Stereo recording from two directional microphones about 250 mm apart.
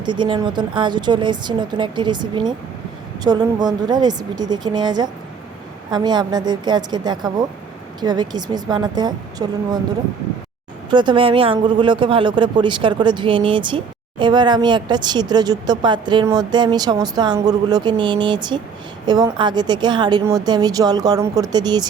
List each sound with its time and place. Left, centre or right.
0.0 s speech: centre
10.9 s speech: centre